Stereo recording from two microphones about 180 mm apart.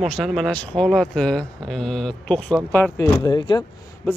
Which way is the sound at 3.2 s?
25° left (ahead or behind).